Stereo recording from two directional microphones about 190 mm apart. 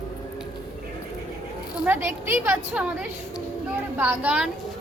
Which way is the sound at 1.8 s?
10° right (ahead or behind).